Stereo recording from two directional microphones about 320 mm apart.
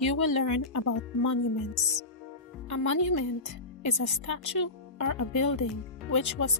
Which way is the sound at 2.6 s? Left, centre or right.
Left.